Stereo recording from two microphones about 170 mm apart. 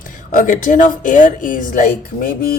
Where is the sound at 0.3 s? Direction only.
50° left (ahead or behind).